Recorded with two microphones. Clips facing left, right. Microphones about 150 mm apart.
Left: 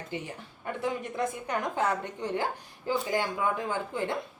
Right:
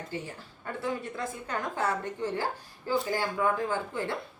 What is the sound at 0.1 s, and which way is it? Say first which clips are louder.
A woman's voice: left 3 dB; 20° left (ahead or behind).